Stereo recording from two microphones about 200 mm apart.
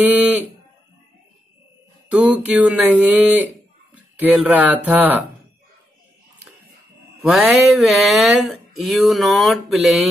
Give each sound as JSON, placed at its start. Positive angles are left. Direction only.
{"t": 0.0, "sound": "speech", "side_deg": -10}
{"t": 2.0, "sound": "a sound", "side_deg": -5}
{"t": 3.9, "sound": "speech", "side_deg": -5}
{"t": 7.2, "sound": "speech", "side_deg": 0}